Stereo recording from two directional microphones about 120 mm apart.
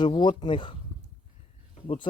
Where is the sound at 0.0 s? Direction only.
40° left (ahead or behind).